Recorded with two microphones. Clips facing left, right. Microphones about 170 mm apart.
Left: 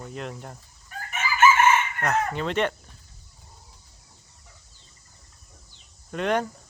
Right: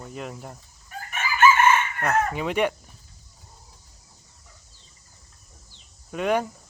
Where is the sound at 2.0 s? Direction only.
10° right (ahead or behind).